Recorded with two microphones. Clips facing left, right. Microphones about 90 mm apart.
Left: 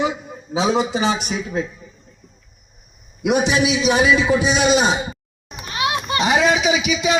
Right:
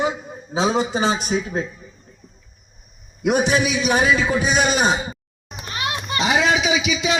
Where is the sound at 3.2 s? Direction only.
40° right (ahead or behind).